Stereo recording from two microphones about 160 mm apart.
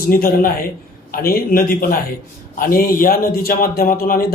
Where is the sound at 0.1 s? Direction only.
65° left (ahead or behind).